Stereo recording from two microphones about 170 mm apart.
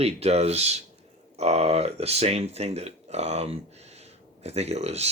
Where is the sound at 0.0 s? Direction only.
40° right (ahead or behind).